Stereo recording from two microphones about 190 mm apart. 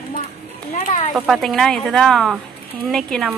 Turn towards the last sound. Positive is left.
turn(degrees=0)  # may be behind; listen again after turning